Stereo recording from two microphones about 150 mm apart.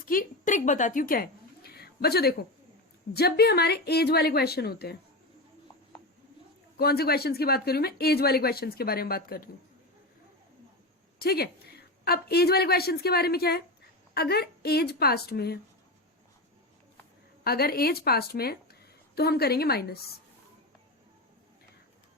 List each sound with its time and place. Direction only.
0.0 s a woman's voice: 65° left (ahead or behind); by 4.9 s 90° left
6.7 s speech: 90° left
11.2 s speech: 90° left
17.4 s a woman's voice: 90° left